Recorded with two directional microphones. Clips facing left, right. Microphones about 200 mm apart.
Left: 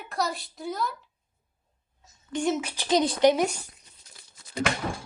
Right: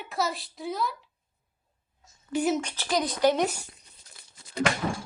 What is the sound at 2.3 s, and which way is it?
Speech, 5° right (ahead or behind).